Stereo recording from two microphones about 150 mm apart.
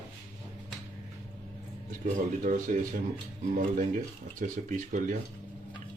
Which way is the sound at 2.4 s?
65° right (ahead or behind).